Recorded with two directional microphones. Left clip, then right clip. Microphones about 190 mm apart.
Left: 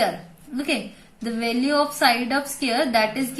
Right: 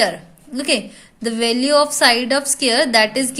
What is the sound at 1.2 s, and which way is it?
Speech, 55° right (ahead or behind).